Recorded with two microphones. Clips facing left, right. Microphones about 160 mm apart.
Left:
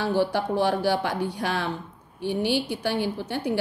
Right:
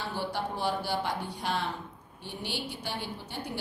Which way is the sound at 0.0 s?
85° left.